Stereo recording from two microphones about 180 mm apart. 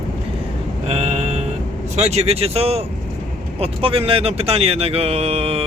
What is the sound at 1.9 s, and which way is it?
Speech, 35° right (ahead or behind).